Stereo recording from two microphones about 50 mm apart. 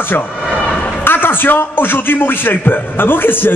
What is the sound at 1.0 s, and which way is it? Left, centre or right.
A man's voice, left.